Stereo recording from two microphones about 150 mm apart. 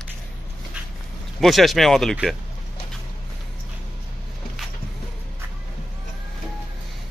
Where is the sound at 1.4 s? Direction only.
Centre (ahead or behind).